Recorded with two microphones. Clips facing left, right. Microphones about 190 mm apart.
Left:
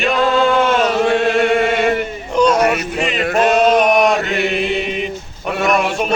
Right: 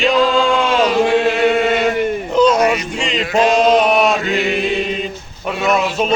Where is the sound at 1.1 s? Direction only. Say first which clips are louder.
Even; 60° left (ahead or behind).